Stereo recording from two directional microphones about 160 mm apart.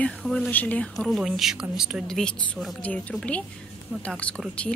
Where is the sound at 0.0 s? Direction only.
5° left (ahead or behind).